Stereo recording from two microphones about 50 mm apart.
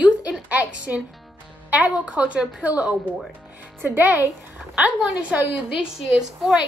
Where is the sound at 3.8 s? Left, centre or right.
Right.